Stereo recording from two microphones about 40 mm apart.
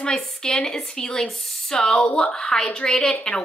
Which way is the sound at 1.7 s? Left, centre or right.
Centre.